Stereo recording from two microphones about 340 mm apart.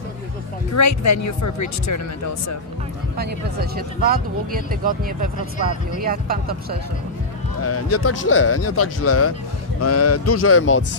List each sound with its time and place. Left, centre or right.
0.7 s speech: left
3.2 s speech: right
7.6 s speech: left